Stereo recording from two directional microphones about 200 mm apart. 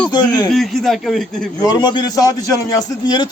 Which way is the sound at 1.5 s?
20° left (ahead or behind).